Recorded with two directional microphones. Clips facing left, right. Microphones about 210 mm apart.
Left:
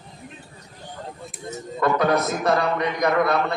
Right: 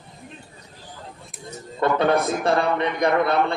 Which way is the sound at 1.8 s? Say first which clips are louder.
Right 1 dB; 30° right (ahead or behind).